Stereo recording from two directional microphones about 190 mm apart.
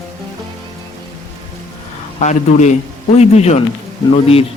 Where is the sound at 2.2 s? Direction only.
35° left (ahead or behind).